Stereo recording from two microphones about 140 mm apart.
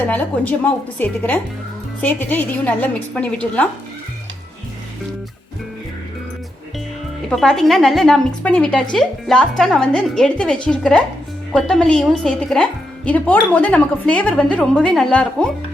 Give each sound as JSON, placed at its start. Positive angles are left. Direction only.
{"t": 0.1, "sound": "a woman's voice", "side_deg": 10}
{"t": 7.3, "sound": "a woman's voice", "side_deg": 5}